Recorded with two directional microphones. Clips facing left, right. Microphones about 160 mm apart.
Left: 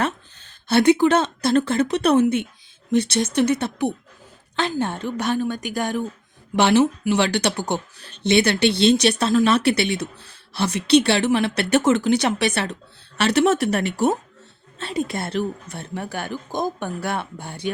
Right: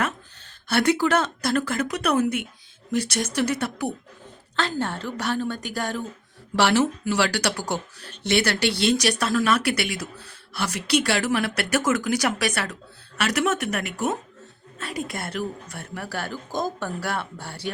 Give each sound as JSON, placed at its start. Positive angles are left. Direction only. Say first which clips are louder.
{"t": 0.4, "sound": "speech", "louder": "left 6 dB", "side_deg": 20}